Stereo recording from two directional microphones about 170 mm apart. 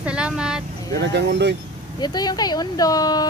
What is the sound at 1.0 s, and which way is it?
Speech, 90° right.